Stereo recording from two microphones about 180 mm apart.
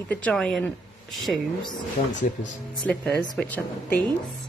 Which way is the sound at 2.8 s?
5° left (ahead or behind).